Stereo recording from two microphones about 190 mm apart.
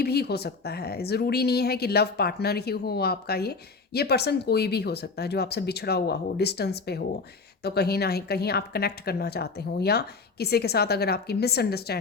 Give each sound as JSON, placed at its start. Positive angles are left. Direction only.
{"t": 0.0, "sound": "speech", "side_deg": 55}